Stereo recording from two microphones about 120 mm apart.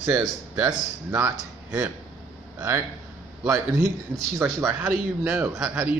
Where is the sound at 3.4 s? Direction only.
20° right (ahead or behind).